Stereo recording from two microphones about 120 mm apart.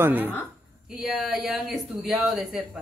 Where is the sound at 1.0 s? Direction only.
Centre (ahead or behind).